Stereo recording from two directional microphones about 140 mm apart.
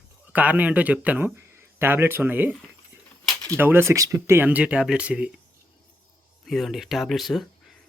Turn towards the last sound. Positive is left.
turn(degrees=0)  # may be behind; listen again after turning